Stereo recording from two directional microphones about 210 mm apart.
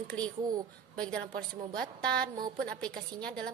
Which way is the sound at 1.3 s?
45° right (ahead or behind).